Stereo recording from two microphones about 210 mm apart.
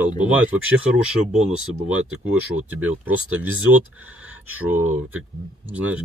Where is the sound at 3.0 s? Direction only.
10° right (ahead or behind).